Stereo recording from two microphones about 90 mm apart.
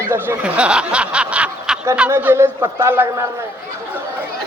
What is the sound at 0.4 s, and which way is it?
Snicker, 15° right (ahead or behind).